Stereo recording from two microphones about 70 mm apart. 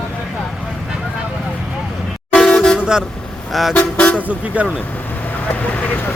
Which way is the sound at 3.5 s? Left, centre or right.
Centre.